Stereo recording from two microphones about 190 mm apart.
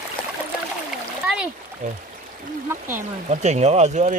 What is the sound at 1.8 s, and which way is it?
Speech, 40° right (ahead or behind).